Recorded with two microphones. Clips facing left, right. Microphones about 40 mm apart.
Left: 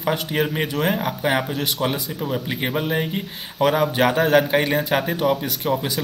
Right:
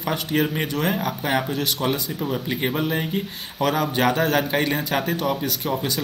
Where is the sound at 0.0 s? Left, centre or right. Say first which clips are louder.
Left 1 dB; centre.